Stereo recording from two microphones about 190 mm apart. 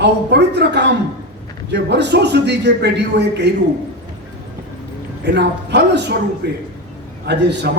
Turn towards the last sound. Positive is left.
turn(degrees=-60)  # may be behind; listen again after turning